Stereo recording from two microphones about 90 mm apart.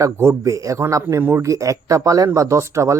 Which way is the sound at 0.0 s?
35° right (ahead or behind).